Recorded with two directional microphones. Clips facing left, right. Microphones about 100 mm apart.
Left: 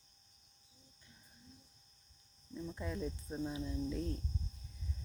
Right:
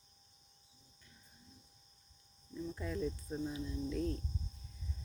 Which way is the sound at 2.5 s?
15° left (ahead or behind).